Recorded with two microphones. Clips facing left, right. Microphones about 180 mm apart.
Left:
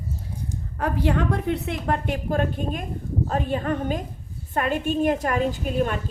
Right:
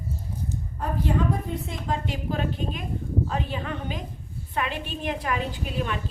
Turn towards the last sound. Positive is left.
turn(degrees=45)  # may be behind; listen again after turning